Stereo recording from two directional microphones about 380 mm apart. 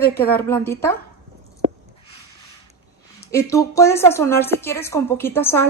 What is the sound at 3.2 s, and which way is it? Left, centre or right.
A woman's voice, centre.